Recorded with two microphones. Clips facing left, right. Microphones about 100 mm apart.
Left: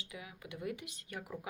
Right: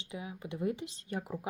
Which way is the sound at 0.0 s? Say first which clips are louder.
Right 7 dB; 30° right (ahead or behind).